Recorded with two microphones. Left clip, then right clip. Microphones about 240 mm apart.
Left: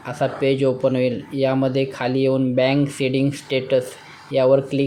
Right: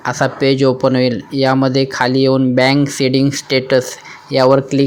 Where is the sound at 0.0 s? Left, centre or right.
Right.